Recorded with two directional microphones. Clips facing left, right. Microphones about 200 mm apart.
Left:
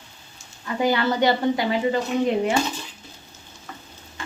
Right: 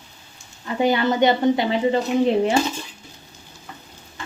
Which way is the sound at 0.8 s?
20° right (ahead or behind).